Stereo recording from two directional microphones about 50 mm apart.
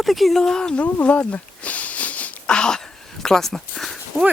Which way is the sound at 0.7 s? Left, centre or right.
Left.